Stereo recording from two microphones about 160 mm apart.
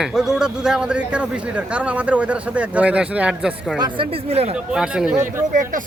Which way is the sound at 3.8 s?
30° right (ahead or behind).